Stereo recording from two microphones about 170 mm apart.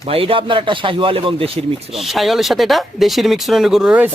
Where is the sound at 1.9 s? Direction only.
Centre (ahead or behind).